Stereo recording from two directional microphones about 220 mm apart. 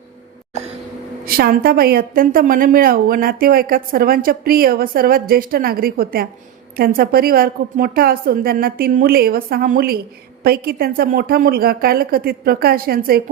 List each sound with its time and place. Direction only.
1.2 s a woman's voice: 45° right (ahead or behind)